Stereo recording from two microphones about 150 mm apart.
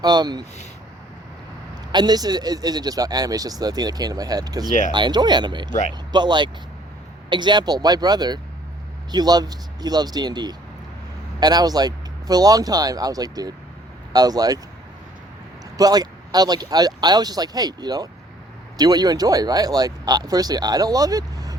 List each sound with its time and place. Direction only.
0.0 s a man's voice: 25° right (ahead or behind)
1.9 s a man's voice: 25° right (ahead or behind)
15.8 s a man's voice: 25° right (ahead or behind)